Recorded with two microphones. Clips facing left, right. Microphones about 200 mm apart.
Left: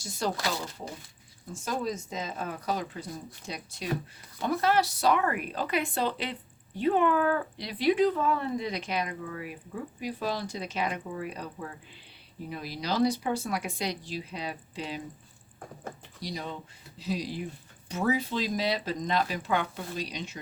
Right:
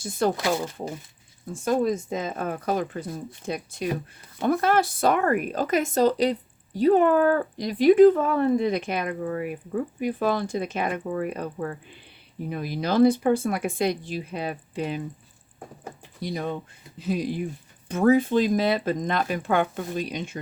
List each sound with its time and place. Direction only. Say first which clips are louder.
0.0 s speech: right 8 dB; 55° right (ahead or behind)
1.6 s speech: right 9 dB; 55° right (ahead or behind)
16.2 s speech: right 7 dB; 55° right (ahead or behind)